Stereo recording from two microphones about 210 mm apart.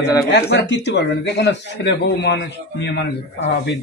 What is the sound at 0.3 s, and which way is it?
Speech, 55° left (ahead or behind).